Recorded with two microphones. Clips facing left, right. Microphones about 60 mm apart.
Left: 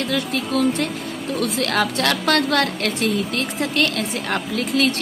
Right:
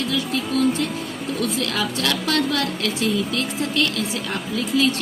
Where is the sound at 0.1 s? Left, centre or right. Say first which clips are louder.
Left 1 dB; left.